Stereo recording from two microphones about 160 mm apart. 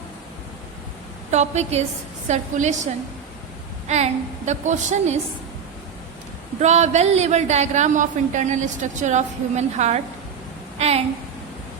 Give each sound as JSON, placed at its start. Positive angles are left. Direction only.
{"t": 1.3, "sound": "speech", "side_deg": -45}
{"t": 6.6, "sound": "a woman's voice", "side_deg": -45}